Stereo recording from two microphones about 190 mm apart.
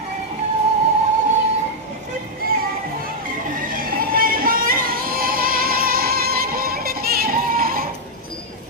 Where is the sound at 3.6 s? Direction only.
50° right (ahead or behind).